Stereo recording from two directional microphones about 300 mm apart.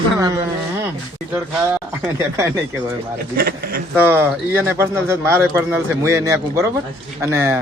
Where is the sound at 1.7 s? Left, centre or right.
Centre.